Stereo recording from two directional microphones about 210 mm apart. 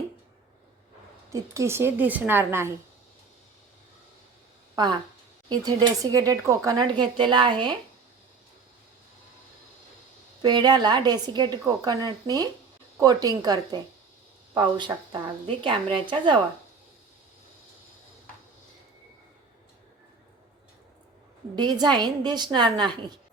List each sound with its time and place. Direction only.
1.3 s a woman's voice: 15° right (ahead or behind)
4.7 s a sound: 20° right (ahead or behind)
5.5 s speech: 20° right (ahead or behind)
10.4 s a woman's voice: 20° right (ahead or behind)
21.5 s speech: 20° right (ahead or behind)